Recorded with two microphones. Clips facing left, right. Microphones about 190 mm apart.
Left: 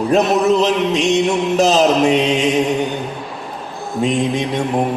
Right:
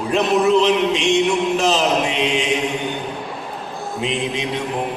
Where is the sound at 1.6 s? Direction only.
40° left (ahead or behind).